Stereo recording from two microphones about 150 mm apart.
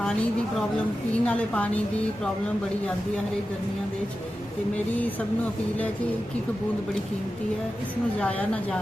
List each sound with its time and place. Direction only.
1.2 s a woman's voice: 10° left (ahead or behind)
8.2 s a woman's voice: 10° left (ahead or behind)